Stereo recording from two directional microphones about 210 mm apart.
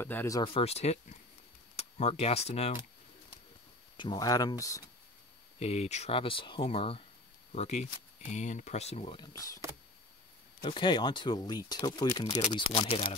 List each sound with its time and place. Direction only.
0.0 s speech: 10° left (ahead or behind)
0.4 s speech: 25° left (ahead or behind)
3.9 s speech: 20° left (ahead or behind)
5.6 s speech: 30° left (ahead or behind)
10.6 s speech: 25° left (ahead or behind)
12.4 s speech: 30° left (ahead or behind)